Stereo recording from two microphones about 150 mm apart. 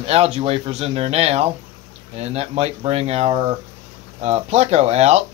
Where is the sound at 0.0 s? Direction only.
40° right (ahead or behind).